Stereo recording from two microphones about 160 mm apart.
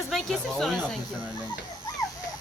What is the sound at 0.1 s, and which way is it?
Speech, centre (ahead or behind).